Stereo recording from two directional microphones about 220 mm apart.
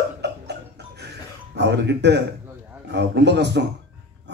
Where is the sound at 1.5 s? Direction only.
50° right (ahead or behind).